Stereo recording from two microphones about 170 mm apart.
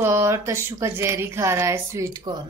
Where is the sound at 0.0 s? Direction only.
15° right (ahead or behind).